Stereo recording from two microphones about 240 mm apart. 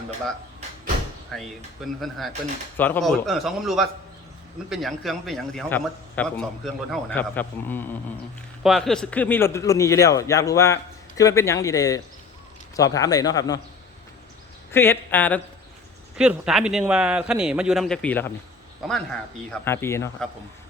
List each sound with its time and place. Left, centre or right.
1.3 s a man's voice: centre
14.7 s speech: centre
16.1 s a man's voice: centre